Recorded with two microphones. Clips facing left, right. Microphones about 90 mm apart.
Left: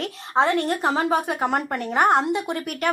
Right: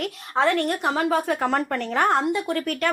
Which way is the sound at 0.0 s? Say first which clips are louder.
Left 1 dB; 20° left (ahead or behind).